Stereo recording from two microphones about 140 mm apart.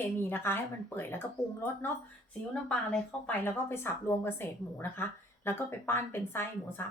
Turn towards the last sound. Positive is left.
turn(degrees=15)  # may be behind; listen again after turning